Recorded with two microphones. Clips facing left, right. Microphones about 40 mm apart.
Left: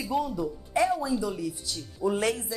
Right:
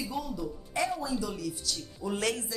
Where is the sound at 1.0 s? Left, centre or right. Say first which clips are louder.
Left 4 dB; centre.